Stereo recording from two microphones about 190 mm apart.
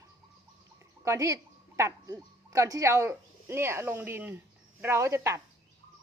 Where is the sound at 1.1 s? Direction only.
15° right (ahead or behind).